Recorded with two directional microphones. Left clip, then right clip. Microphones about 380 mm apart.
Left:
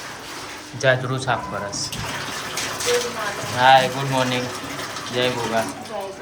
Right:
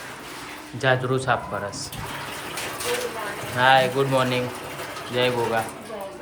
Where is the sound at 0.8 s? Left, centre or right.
Centre.